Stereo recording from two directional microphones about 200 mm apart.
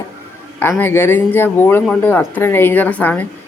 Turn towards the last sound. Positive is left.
turn(degrees=10)  # may be behind; listen again after turning